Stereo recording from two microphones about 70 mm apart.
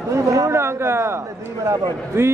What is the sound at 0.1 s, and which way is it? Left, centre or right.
Speech, right.